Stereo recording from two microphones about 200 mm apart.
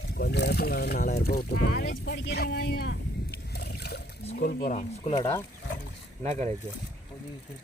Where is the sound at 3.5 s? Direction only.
55° left (ahead or behind).